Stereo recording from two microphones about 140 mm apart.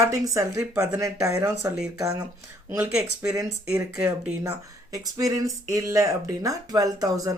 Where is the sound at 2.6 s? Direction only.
15° right (ahead or behind).